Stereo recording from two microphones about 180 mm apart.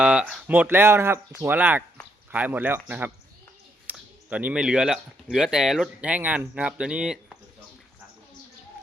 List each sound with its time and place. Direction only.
0.0 s speech: 5° right (ahead or behind)